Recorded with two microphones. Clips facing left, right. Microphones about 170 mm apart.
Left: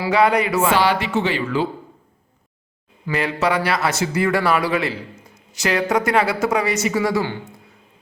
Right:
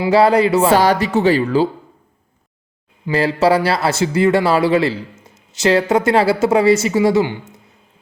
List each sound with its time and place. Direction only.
0.1 s speech: 30° right (ahead or behind)
3.1 s a man's voice: 30° right (ahead or behind)